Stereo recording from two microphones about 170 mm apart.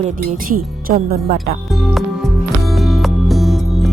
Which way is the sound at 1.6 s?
Centre (ahead or behind).